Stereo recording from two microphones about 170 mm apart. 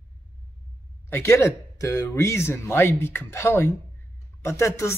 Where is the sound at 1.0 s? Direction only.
15° left (ahead or behind).